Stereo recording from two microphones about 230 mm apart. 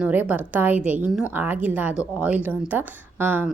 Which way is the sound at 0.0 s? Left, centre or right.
Centre.